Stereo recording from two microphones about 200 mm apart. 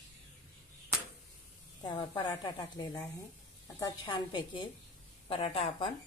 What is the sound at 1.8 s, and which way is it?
Speech, 20° left (ahead or behind).